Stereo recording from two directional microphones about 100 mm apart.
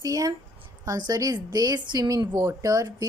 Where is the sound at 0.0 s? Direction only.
35° right (ahead or behind).